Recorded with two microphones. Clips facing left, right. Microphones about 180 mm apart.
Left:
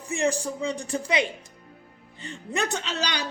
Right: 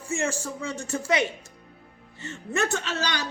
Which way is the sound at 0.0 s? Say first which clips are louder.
Left 3 dB; 15° left (ahead or behind).